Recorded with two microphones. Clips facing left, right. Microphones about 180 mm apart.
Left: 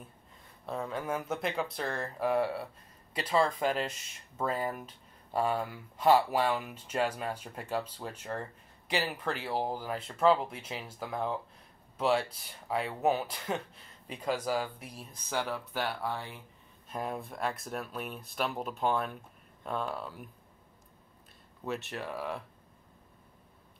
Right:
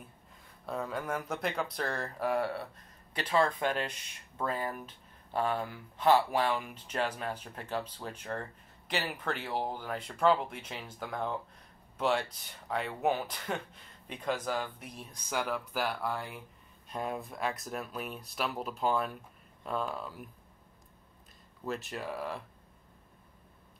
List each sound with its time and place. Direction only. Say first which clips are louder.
0.7 s speech: left 1 dB; centre (ahead or behind)
21.6 s speech: even; centre (ahead or behind)